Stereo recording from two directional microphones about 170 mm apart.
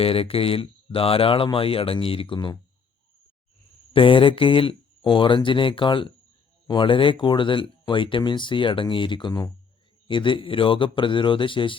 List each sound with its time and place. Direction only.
0.0 s speech: 35° left (ahead or behind)
3.9 s speech: 30° left (ahead or behind)